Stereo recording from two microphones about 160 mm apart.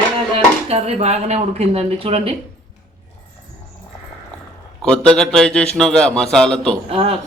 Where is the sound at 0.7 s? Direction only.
40° right (ahead or behind).